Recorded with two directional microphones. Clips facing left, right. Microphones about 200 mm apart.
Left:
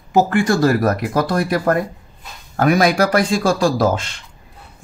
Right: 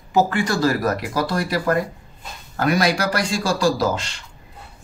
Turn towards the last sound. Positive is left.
turn(degrees=50)  # may be behind; listen again after turning